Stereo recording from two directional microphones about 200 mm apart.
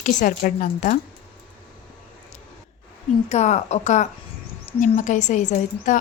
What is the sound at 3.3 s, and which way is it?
A woman's voice, 35° left (ahead or behind).